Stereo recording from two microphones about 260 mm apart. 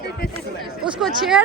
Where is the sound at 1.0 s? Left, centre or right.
Centre.